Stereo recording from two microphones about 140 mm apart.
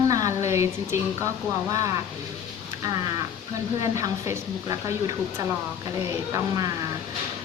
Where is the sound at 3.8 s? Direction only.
20° right (ahead or behind).